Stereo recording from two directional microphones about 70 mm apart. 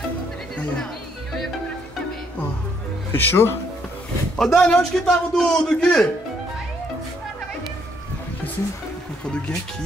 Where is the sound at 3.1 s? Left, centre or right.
Left.